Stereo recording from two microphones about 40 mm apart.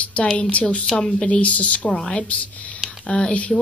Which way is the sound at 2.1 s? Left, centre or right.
Left.